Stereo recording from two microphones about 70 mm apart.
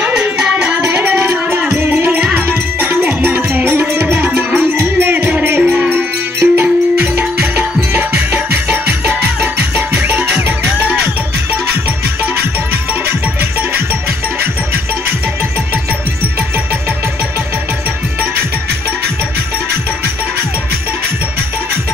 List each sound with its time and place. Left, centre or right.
0.0 s music: centre
4.0 s tabla: right
4.7 s music: right
5.6 s music: centre